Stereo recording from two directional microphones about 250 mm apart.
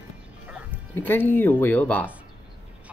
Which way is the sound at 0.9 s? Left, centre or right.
Centre.